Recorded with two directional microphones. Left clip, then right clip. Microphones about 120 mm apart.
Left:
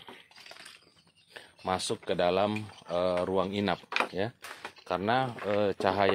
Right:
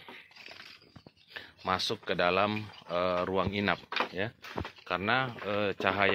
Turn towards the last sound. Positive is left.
turn(degrees=50)  # may be behind; listen again after turning